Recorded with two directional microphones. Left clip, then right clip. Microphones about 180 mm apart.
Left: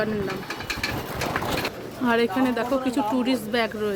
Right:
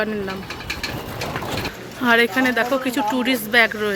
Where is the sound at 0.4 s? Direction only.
30° right (ahead or behind).